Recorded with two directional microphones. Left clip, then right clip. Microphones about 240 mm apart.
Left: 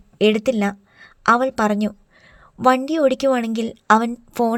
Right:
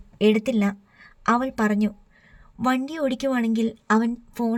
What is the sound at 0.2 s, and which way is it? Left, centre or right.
A woman's voice, centre.